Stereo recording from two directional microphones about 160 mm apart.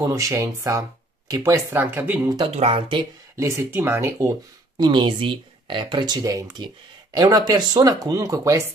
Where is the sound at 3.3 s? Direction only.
20° right (ahead or behind).